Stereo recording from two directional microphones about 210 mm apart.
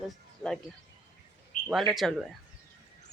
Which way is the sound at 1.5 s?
35° left (ahead or behind).